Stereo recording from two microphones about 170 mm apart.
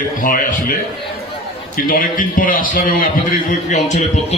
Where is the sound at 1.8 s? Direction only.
55° left (ahead or behind).